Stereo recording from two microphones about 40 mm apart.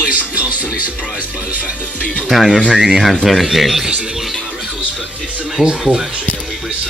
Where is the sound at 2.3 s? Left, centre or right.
Centre.